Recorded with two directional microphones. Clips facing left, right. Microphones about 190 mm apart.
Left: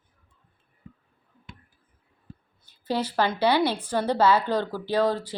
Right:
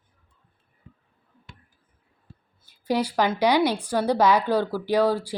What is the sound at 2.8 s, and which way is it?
A woman's voice, 10° right (ahead or behind).